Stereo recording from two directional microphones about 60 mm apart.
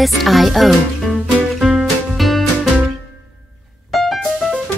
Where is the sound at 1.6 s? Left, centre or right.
Centre.